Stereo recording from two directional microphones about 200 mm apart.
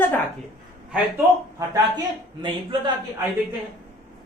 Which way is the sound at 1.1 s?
15° right (ahead or behind).